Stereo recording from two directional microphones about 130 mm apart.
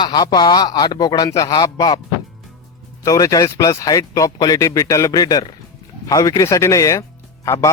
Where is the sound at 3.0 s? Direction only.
25° left (ahead or behind).